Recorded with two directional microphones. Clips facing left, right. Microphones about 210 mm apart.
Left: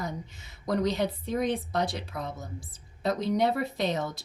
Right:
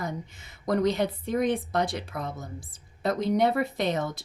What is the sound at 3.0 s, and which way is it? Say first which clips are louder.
Speech: right 2 dB; 50° right (ahead or behind).